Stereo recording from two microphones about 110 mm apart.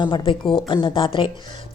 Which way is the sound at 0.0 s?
45° left (ahead or behind).